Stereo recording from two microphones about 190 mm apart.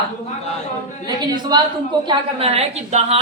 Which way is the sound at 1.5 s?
20° right (ahead or behind).